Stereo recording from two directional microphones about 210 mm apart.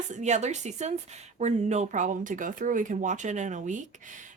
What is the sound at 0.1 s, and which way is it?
Speech, 35° right (ahead or behind).